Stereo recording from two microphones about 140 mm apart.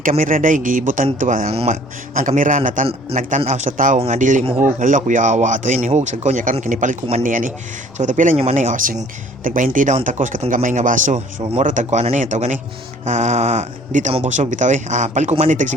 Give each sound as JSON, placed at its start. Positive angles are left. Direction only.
{"t": 0.0, "sound": "speech", "side_deg": -70}
{"t": 1.5, "sound": "speech", "side_deg": -50}